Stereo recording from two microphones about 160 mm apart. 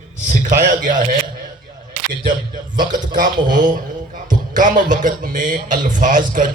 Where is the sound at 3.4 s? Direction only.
55° right (ahead or behind).